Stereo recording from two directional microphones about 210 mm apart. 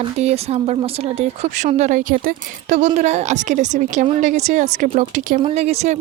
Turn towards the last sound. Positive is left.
turn(degrees=-30)  # may be behind; listen again after turning